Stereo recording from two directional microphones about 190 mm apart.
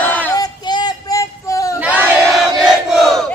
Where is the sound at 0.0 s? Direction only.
10° left (ahead or behind).